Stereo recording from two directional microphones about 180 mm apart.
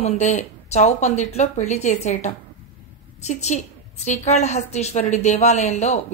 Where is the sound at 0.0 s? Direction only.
40° left (ahead or behind).